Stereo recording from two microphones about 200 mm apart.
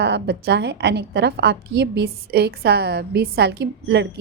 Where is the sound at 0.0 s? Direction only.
55° right (ahead or behind).